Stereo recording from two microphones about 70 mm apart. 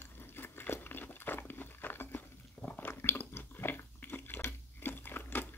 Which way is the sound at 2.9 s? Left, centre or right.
Left.